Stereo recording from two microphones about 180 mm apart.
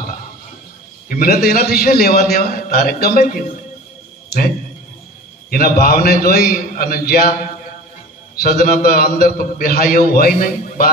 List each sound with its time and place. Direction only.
1.0 s a man's voice: 55° left (ahead or behind)
5.5 s a man's voice: 55° left (ahead or behind)